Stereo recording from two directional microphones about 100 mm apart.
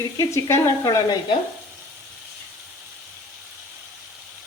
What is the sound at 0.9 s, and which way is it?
Sizzle, 40° left (ahead or behind).